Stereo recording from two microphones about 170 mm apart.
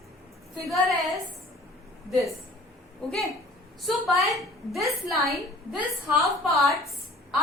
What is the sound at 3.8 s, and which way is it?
A woman's voice, centre (ahead or behind).